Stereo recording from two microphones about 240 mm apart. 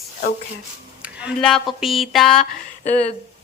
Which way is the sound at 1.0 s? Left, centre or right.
Centre.